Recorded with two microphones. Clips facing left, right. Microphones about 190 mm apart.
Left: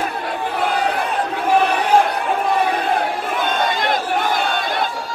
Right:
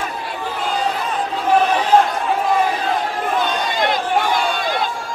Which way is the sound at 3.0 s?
55° left (ahead or behind).